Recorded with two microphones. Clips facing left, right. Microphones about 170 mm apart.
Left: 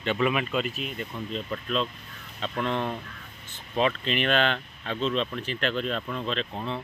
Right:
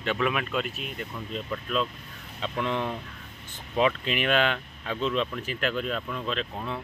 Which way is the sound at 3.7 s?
10° right (ahead or behind).